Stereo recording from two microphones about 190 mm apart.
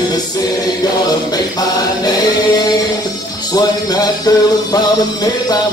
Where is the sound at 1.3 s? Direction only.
20° left (ahead or behind).